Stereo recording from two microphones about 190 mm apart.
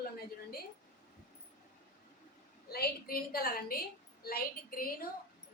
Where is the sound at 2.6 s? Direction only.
50° left (ahead or behind).